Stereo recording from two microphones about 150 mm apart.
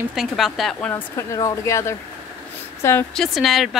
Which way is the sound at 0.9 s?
20° left (ahead or behind).